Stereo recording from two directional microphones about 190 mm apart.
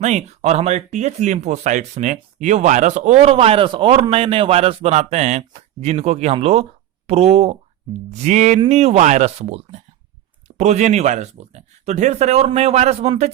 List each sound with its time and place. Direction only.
0.0 s speech: 35° right (ahead or behind)